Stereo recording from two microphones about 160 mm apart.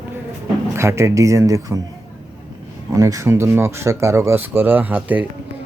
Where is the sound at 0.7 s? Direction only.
15° right (ahead or behind).